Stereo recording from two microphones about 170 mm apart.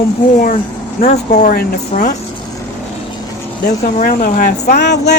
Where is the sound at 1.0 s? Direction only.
45° left (ahead or behind).